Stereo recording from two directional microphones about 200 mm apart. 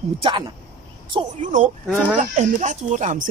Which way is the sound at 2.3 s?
40° right (ahead or behind).